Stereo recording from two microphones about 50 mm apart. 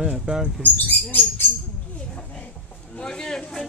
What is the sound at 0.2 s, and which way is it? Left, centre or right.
Speech, centre.